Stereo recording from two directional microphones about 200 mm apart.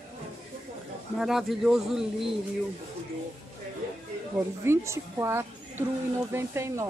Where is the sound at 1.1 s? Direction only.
Centre (ahead or behind).